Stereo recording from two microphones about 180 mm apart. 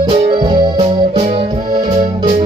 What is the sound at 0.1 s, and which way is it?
Keyboard, 30° right (ahead or behind).